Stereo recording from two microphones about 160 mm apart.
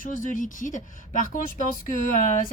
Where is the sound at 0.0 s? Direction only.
55° left (ahead or behind).